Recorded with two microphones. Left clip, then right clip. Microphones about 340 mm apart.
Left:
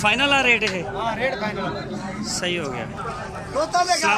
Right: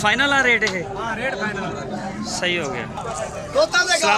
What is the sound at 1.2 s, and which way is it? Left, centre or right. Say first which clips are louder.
Speech: even; centre.